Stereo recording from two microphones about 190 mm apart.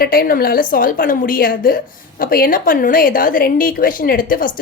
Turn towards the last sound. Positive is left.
turn(degrees=45)  # may be behind; listen again after turning